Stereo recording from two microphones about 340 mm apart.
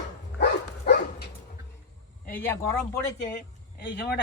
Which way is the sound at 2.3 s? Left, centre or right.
Centre.